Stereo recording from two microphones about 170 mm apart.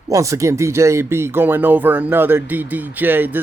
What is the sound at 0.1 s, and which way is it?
Speech, 20° right (ahead or behind).